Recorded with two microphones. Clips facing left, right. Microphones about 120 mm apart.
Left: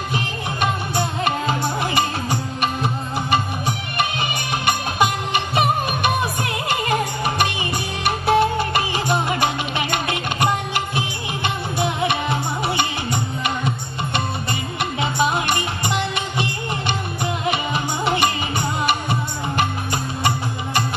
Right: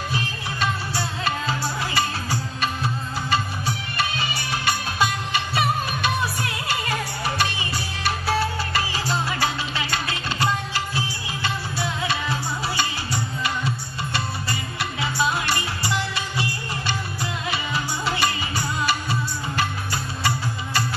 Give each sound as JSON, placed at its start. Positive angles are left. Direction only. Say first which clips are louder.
{"t": 0.1, "sound": "music", "louder": "left 3 dB", "side_deg": 20}